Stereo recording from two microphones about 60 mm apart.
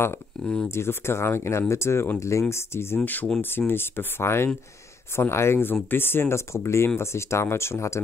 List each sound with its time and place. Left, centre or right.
0.4 s speech: centre
0.7 s speech: left